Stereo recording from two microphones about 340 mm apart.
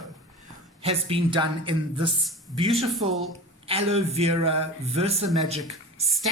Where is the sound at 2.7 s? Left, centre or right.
Centre.